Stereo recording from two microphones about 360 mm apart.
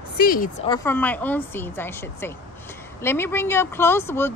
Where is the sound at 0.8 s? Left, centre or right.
Centre.